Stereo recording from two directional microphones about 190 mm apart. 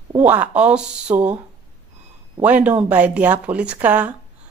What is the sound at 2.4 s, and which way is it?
A woman's voice, 5° right (ahead or behind).